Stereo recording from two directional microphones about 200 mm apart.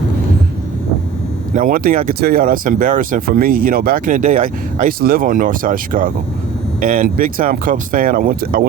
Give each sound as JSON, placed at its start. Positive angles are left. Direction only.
{"t": 1.5, "sound": "speech", "side_deg": -45}